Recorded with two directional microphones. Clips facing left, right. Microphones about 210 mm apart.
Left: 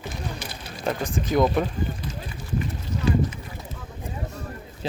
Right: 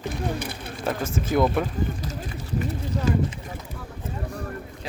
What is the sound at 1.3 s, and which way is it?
Speech, 5° right (ahead or behind).